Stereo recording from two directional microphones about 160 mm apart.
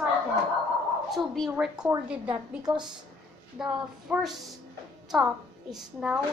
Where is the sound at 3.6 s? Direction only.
5° right (ahead or behind).